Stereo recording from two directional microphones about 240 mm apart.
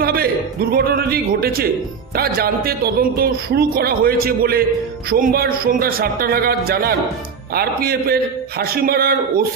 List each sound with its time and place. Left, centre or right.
0.0 s a man's voice: right